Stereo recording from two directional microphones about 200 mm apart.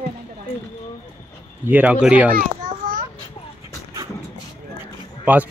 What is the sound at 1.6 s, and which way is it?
Speech, 10° right (ahead or behind).